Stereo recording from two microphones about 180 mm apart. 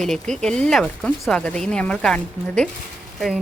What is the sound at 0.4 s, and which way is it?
A woman's voice, 5° left (ahead or behind).